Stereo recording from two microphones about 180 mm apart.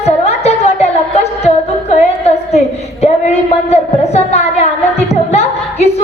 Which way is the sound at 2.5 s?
40° left (ahead or behind).